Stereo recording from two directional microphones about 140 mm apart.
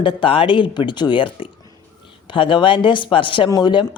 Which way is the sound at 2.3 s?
35° left (ahead or behind).